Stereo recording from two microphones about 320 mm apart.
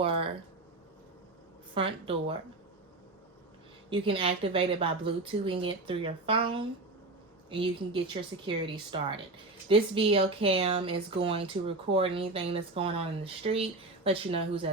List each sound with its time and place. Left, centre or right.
0.0 s a sound: centre
1.7 s speech: centre
3.8 s speech: centre